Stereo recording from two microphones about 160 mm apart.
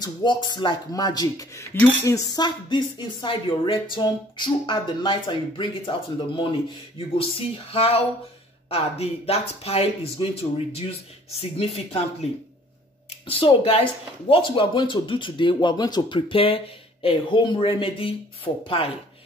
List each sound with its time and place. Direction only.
0.0 s speech: 30° left (ahead or behind)
13.3 s speech: 35° left (ahead or behind)